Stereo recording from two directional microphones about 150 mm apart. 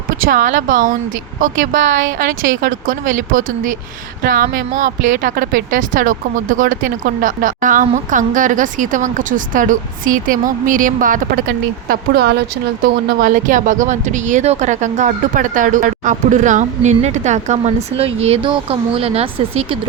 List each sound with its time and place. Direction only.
0.3 s speech: 60° right (ahead or behind)
4.2 s speech: 85° right
12.8 s speech: 75° right (ahead or behind); by 19.8 s 40° right (ahead or behind)